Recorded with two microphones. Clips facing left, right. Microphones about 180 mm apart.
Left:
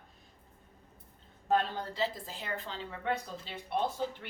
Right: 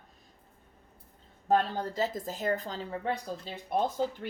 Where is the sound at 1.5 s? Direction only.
40° right (ahead or behind).